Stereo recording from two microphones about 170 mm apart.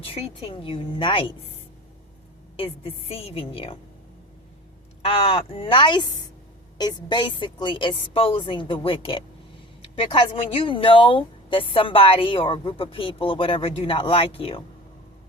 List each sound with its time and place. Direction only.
0.0 s speech: 35° left (ahead or behind)
2.6 s speech: 35° left (ahead or behind)
5.0 s a woman's voice: 35° left (ahead or behind)